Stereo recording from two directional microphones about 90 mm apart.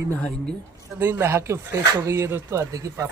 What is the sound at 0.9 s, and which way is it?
Speech, 30° right (ahead or behind).